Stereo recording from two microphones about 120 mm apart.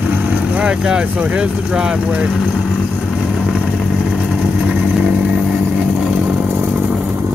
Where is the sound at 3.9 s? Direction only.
5° right (ahead or behind).